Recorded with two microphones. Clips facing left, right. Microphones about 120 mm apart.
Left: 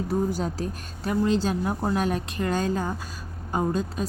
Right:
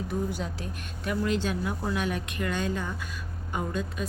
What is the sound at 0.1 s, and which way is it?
Speech, 40° left (ahead or behind).